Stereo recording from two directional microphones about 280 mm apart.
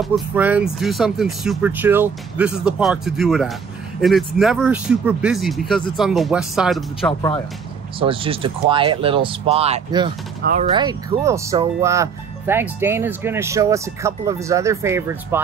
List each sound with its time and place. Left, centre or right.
0.0 s speech: centre
8.0 s speech: centre
10.4 s speech: right
10.7 s speech: centre